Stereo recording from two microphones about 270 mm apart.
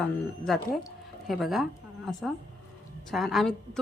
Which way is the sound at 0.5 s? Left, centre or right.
Centre.